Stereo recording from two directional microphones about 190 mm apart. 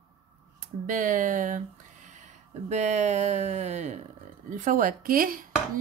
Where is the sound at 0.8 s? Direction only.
45° right (ahead or behind).